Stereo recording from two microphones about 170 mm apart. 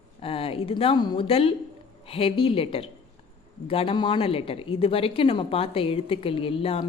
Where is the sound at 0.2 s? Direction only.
35° left (ahead or behind).